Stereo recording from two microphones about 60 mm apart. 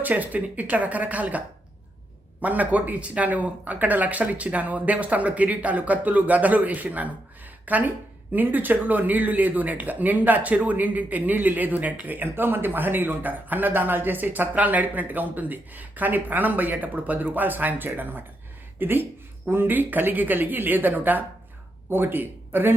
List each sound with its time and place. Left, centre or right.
0.0 s speech: right
2.4 s speech: right